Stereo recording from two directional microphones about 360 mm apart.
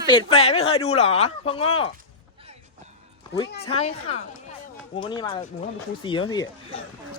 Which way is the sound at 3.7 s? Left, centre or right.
Centre.